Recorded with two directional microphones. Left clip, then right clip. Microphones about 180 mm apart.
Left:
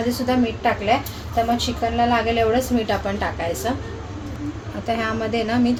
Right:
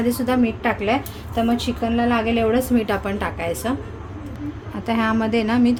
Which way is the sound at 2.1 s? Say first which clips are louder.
Left 1 dB; 75° right (ahead or behind).